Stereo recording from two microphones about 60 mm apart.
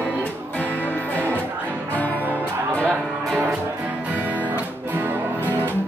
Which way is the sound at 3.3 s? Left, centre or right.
Right.